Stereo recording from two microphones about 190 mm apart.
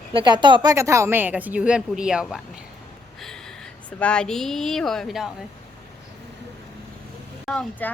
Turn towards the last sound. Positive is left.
turn(degrees=5)  # may be behind; listen again after turning